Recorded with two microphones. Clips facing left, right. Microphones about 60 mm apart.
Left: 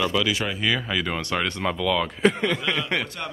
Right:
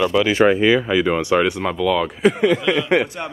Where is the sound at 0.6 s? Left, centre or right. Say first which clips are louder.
Right 9 dB; centre.